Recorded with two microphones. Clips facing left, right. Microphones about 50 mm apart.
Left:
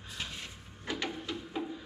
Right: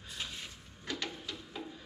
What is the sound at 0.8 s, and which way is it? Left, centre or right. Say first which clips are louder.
Printer: left 4 dB; centre.